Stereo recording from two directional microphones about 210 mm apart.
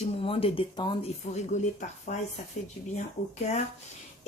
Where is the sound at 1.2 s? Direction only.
35° left (ahead or behind).